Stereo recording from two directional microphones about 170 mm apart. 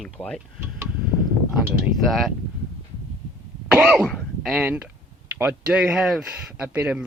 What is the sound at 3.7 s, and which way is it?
Speech, centre (ahead or behind).